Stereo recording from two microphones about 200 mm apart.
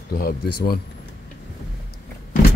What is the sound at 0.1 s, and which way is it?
Speech, 50° left (ahead or behind).